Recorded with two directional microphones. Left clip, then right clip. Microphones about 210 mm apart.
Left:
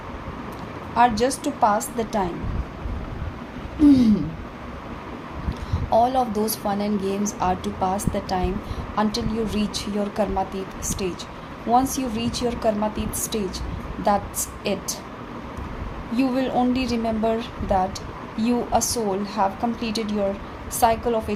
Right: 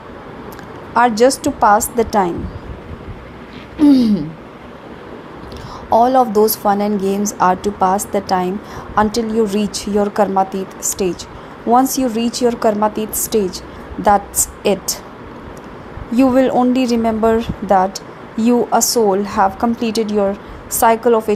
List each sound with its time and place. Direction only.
0.9 s a woman's voice: 40° right (ahead or behind)
3.8 s speech: 45° right (ahead or behind)
5.9 s a woman's voice: 35° right (ahead or behind)
14.6 s speech: 40° right (ahead or behind)
16.1 s a woman's voice: 40° right (ahead or behind)